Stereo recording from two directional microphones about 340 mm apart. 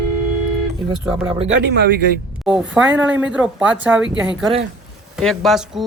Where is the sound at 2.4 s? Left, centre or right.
Centre.